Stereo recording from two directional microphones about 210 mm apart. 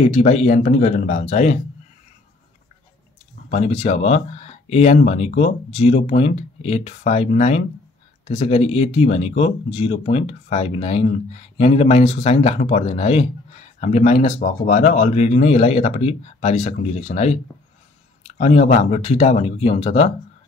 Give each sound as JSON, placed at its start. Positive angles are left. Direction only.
{"t": 0.0, "sound": "speech", "side_deg": 30}
{"t": 3.4, "sound": "speech", "side_deg": 30}